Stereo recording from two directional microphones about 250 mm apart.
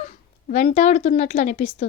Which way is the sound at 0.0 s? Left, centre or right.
Left.